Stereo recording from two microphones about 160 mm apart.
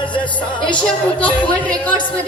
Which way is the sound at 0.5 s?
30° left (ahead or behind).